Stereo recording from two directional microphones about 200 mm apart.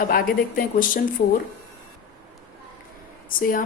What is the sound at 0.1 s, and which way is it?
Speech, 45° left (ahead or behind).